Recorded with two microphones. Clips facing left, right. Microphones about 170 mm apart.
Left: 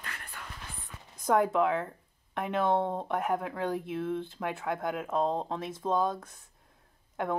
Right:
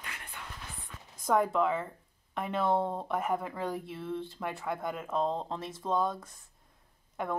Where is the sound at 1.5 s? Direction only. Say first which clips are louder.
Left 2 dB; 10° left (ahead or behind).